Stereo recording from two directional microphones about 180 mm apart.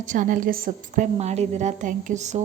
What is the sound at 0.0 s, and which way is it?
A woman's voice, 45° right (ahead or behind).